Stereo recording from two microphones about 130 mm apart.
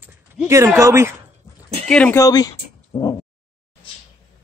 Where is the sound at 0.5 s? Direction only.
20° right (ahead or behind).